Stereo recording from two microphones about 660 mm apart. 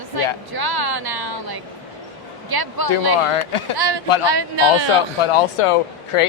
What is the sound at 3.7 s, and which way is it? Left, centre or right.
Speech, right.